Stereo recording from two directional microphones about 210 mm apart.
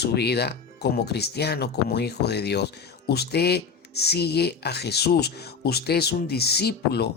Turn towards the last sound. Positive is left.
turn(degrees=50)  # may be behind; listen again after turning